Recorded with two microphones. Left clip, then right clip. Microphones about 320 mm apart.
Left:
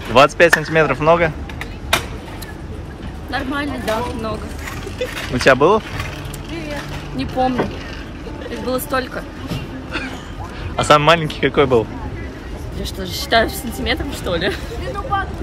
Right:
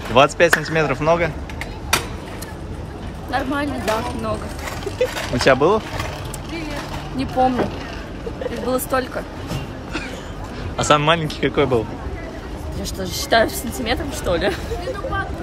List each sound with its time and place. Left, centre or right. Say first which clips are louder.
0.1 s speech: left 3 dB; centre
3.3 s speech: even; centre
4.6 s vehicle: right 4 dB; right
5.4 s speech: left 3 dB; centre
7.2 s speech: right 1 dB; centre
8.6 s vehicle: left 1 dB; centre
10.8 s speech: left 4 dB; centre
13.0 s speech: left 1 dB; centre